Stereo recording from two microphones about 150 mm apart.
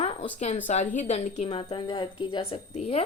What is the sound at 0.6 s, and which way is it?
A woman's voice, 55° left (ahead or behind).